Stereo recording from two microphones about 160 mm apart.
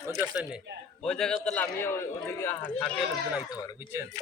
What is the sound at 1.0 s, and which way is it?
A man's voice, 5° left (ahead or behind).